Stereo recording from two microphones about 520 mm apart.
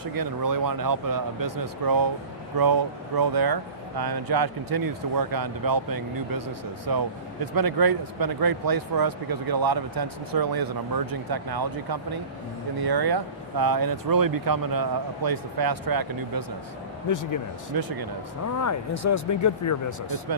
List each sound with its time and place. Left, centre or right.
0.0 s speech: right
17.1 s speech: left
17.7 s speech: right
18.6 s speech: left